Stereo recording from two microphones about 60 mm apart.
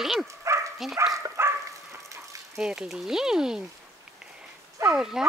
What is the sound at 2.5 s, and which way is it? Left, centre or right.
Speech, centre.